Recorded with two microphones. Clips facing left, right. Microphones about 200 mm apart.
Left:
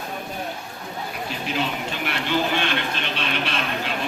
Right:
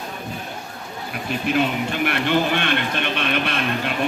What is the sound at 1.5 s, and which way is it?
Speech, 55° right (ahead or behind).